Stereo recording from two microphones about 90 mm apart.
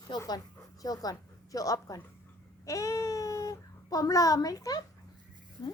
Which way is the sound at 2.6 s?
40° left (ahead or behind).